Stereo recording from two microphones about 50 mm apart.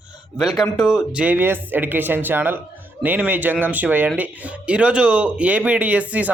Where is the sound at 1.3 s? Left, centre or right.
Right.